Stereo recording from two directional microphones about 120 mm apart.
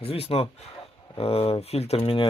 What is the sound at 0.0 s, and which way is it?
Speech, 55° left (ahead or behind).